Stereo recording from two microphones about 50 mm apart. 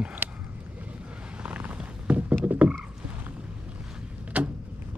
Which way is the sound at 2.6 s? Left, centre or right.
Right.